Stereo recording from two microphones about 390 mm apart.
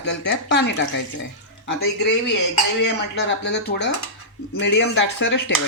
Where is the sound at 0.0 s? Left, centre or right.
Left.